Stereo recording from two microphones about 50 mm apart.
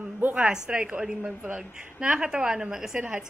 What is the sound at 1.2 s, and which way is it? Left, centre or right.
Speech, right.